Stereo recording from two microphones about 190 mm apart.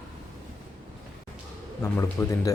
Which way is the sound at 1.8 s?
15° left (ahead or behind).